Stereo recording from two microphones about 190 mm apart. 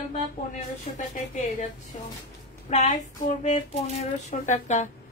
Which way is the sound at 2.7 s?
40° left (ahead or behind).